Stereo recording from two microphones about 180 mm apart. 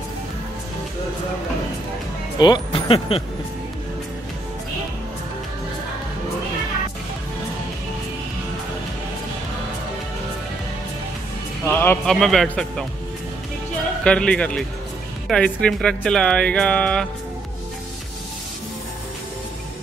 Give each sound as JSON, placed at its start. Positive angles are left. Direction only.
{"t": 2.3, "sound": "speech", "side_deg": 25}
{"t": 11.6, "sound": "speech", "side_deg": 10}
{"t": 14.0, "sound": "speech", "side_deg": 5}